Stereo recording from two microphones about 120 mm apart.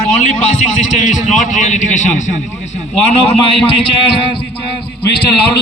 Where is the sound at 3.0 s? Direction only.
60° left (ahead or behind).